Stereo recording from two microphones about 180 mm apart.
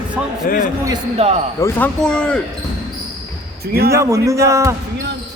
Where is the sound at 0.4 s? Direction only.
50° left (ahead or behind).